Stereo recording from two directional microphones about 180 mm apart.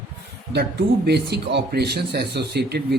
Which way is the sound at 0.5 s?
65° right (ahead or behind).